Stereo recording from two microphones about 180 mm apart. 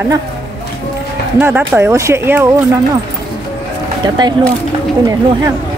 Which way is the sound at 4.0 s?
25° right (ahead or behind).